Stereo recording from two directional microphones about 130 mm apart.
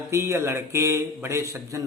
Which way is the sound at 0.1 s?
20° right (ahead or behind).